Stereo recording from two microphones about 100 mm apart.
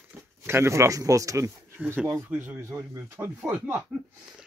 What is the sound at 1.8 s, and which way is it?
Speech, 20° right (ahead or behind).